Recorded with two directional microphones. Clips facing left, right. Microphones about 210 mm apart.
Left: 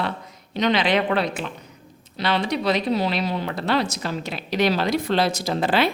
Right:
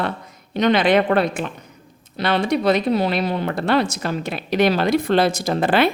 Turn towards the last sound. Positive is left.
turn(degrees=-55)  # may be behind; listen again after turning